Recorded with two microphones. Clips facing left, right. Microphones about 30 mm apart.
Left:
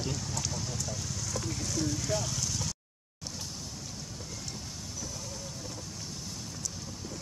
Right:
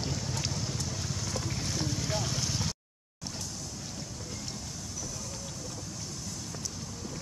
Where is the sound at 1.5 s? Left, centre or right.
Right.